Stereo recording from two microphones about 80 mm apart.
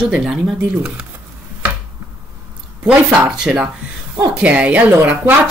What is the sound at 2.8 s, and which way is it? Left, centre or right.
Speech, centre.